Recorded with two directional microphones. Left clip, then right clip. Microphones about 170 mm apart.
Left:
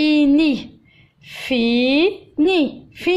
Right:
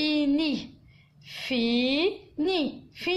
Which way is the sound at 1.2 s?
30° left (ahead or behind).